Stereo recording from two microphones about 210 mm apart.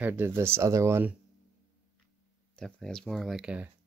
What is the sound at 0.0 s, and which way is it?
Speech, 10° right (ahead or behind).